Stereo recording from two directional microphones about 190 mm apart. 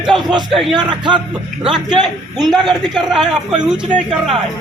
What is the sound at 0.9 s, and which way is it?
Speech, 25° right (ahead or behind).